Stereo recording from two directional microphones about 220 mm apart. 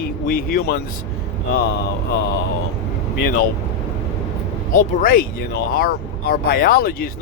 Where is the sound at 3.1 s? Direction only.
45° left (ahead or behind).